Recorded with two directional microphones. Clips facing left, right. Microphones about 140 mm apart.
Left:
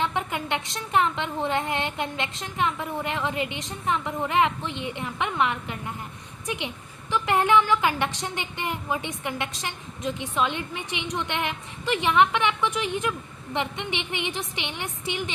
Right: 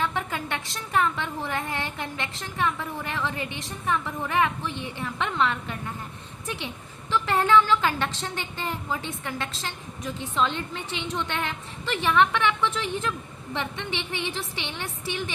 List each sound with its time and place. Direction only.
0.0 s a woman's voice: 20° left (ahead or behind)